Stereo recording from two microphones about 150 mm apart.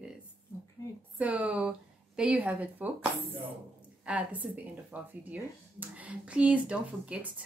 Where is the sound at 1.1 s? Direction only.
10° right (ahead or behind).